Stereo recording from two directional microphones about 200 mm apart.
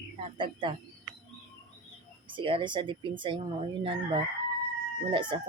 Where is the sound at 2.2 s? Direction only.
25° right (ahead or behind).